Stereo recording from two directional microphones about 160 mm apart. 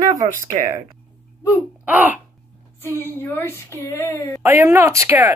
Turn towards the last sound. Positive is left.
turn(degrees=-15)  # may be behind; listen again after turning